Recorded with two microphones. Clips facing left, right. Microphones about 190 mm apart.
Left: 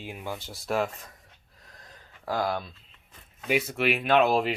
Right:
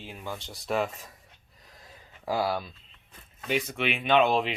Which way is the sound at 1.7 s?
5° right (ahead or behind).